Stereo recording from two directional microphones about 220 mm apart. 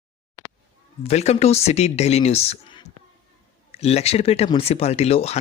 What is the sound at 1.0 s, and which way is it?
Speech, 30° left (ahead or behind).